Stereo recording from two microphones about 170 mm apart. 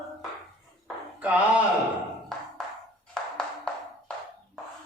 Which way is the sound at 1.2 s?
5° right (ahead or behind).